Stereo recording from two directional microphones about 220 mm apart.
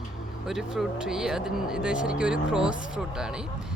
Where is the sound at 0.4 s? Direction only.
Centre (ahead or behind).